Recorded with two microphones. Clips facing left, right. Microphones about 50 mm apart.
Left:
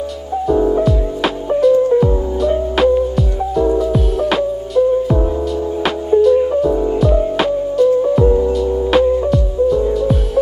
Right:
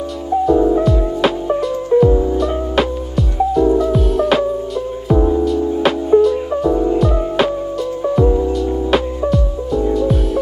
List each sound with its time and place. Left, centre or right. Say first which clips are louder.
0.5 s music: even; centre